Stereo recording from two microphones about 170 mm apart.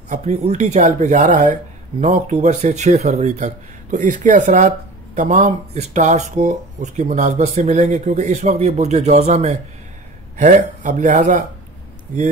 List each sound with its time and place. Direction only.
0.1 s speech: 45° right (ahead or behind)